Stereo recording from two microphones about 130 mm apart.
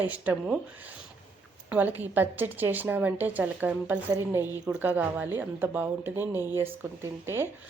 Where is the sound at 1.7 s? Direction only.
15° right (ahead or behind).